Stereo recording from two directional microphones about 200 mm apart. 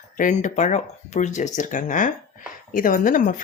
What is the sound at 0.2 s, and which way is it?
A woman's voice, 40° left (ahead or behind).